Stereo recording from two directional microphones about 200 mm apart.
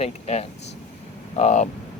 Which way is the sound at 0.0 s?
35° left (ahead or behind).